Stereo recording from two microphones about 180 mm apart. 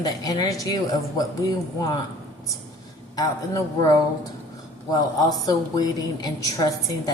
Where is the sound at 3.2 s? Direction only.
20° left (ahead or behind).